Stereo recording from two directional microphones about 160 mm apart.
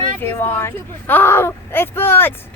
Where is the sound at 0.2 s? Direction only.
15° left (ahead or behind).